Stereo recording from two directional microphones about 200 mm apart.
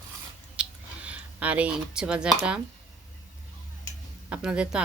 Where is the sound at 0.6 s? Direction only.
5° right (ahead or behind).